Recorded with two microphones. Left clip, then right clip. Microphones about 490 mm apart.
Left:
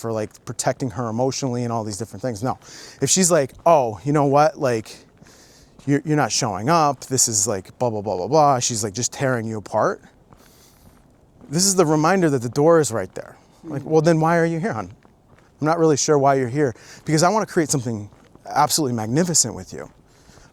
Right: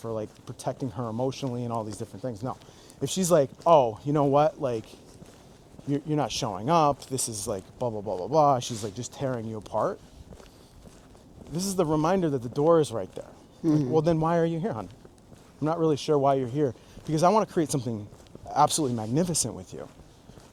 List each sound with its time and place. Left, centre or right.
0.0 s speech: left
5.9 s speech: left
11.5 s speech: left
13.9 s speech: left